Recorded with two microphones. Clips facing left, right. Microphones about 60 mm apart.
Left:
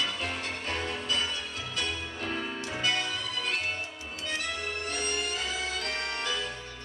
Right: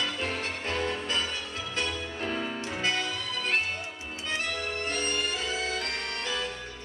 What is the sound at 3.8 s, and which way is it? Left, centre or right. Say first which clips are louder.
Music: even; right.